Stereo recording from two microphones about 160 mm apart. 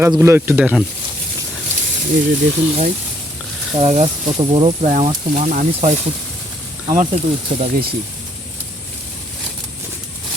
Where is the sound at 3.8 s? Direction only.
40° right (ahead or behind).